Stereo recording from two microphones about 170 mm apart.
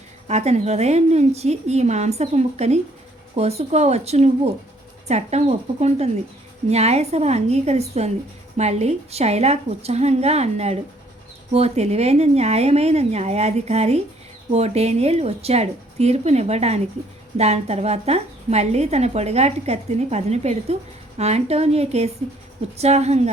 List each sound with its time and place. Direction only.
0.3 s a woman's voice: 40° right (ahead or behind)